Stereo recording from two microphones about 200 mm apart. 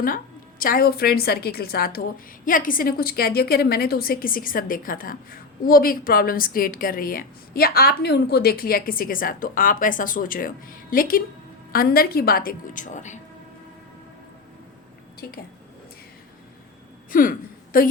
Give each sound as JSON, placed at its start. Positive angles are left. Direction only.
{"t": 0.6, "sound": "a woman's voice", "side_deg": 45}
{"t": 15.2, "sound": "a woman's voice", "side_deg": 50}
{"t": 17.1, "sound": "a woman's voice", "side_deg": 45}